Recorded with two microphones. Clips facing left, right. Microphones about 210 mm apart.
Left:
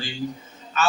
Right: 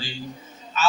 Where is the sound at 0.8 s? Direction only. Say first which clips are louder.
Even; 55° left (ahead or behind).